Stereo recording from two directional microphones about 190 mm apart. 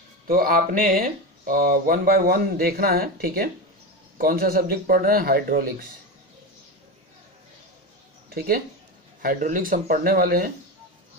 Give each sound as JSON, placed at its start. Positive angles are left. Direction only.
{"t": 0.3, "sound": "speech", "side_deg": -50}
{"t": 9.2, "sound": "speech", "side_deg": -45}